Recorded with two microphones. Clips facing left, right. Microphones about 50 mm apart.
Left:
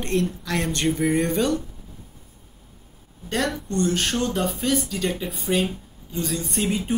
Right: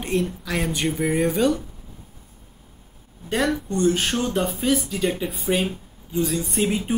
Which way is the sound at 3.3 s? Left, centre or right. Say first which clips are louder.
Right 3 dB; centre.